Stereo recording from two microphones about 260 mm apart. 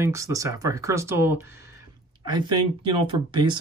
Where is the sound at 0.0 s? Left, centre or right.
Centre.